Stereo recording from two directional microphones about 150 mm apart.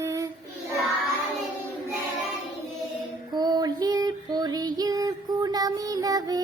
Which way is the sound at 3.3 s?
30° right (ahead or behind).